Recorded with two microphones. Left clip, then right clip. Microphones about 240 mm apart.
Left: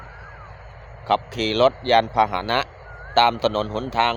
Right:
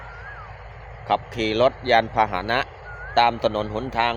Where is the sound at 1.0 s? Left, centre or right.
Centre.